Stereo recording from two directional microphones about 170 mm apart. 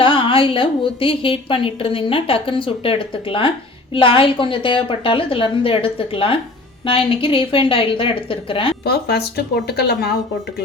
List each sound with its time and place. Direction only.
0.0 s a woman's voice: 30° left (ahead or behind)
8.8 s speech: 70° left (ahead or behind)